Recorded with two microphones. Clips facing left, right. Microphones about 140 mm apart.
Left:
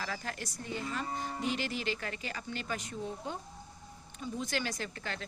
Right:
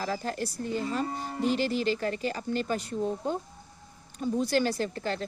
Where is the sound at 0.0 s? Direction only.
35° right (ahead or behind).